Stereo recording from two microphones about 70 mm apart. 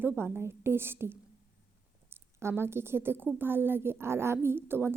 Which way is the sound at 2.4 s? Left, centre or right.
Right.